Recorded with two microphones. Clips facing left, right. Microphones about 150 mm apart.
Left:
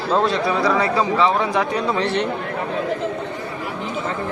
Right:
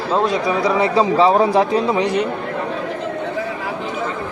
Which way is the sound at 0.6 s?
25° right (ahead or behind).